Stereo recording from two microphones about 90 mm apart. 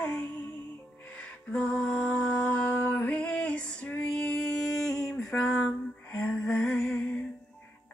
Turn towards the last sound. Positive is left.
turn(degrees=10)  # may be behind; listen again after turning